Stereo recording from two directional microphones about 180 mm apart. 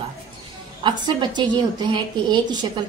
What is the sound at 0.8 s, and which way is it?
A woman's voice, 25° right (ahead or behind).